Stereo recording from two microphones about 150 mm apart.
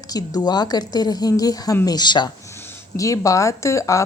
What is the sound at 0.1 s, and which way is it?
A woman's voice, 25° left (ahead or behind).